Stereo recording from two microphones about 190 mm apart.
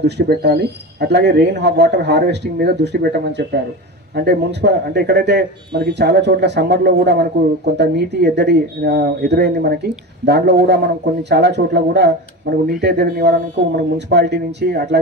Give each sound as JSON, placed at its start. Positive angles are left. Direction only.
{"t": 0.0, "sound": "speech", "side_deg": -60}